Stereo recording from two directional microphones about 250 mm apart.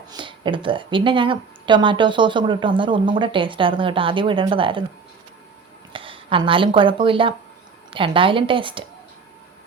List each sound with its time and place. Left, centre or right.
0.1 s speech: centre
5.9 s a sound: right
6.7 s speech: centre